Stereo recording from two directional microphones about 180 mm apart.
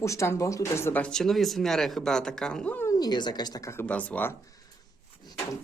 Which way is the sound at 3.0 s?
25° left (ahead or behind).